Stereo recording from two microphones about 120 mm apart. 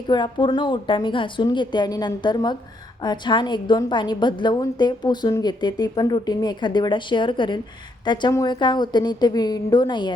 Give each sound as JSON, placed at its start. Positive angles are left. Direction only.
{"t": 0.1, "sound": "a woman's voice", "side_deg": 40}